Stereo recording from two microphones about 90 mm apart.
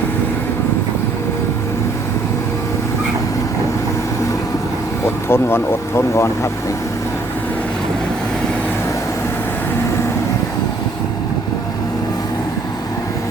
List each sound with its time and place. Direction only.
5.0 s speech: 25° left (ahead or behind)